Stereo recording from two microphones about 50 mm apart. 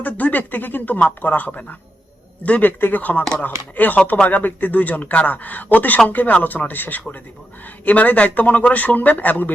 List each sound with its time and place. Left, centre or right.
0.0 s a man's voice: left